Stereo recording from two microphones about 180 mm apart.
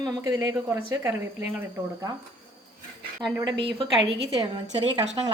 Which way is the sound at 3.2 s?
25° right (ahead or behind).